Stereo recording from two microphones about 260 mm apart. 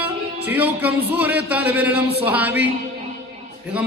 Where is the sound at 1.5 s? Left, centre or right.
Centre.